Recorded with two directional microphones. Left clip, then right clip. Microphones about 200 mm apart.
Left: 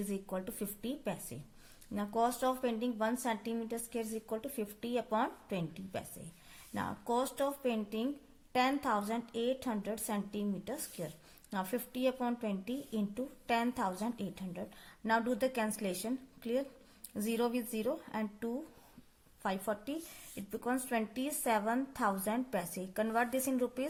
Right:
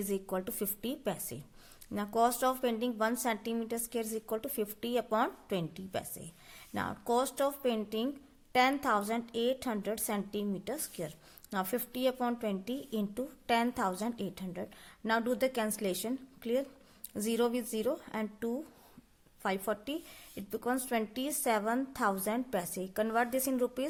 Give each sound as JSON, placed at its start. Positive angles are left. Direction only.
{"t": 0.1, "sound": "a woman's voice", "side_deg": -35}